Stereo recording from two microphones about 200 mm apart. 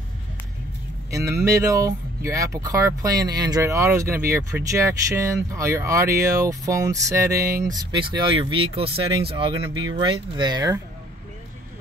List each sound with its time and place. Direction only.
1.1 s speech: 15° right (ahead or behind)
10.0 s speech: 20° right (ahead or behind)